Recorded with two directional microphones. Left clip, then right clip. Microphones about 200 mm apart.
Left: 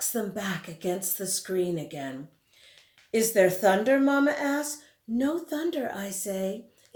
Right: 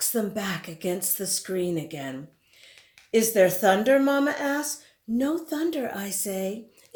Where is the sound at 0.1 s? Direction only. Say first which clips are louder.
Right 2 dB; 40° right (ahead or behind).